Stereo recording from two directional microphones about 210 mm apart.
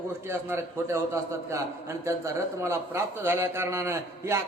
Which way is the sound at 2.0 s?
15° right (ahead or behind).